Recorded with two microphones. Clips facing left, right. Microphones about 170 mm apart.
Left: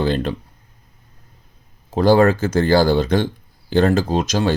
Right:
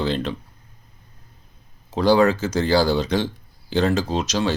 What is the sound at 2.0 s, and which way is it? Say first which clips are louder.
Speech: left 3 dB; 50° left (ahead or behind).